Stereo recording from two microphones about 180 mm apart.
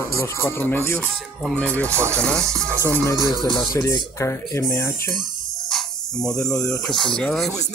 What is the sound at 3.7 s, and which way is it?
Speech, 20° left (ahead or behind).